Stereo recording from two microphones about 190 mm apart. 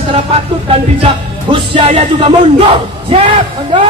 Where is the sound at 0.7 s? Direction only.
30° right (ahead or behind).